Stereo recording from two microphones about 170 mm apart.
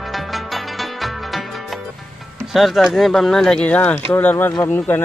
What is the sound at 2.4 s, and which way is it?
Speech, centre (ahead or behind).